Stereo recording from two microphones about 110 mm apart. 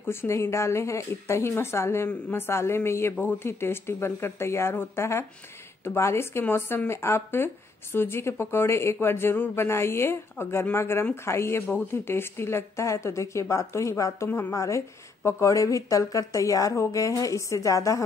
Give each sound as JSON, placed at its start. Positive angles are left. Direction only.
{"t": 0.0, "sound": "speech", "side_deg": 20}